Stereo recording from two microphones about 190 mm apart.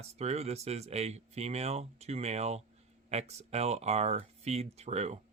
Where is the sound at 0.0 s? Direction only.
35° right (ahead or behind).